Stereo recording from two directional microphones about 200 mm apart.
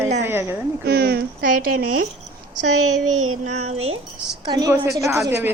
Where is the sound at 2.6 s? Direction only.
35° right (ahead or behind).